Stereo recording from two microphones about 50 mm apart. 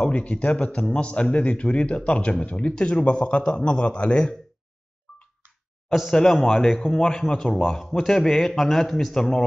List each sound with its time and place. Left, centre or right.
0.0 s a man's voice: left
5.9 s speech: centre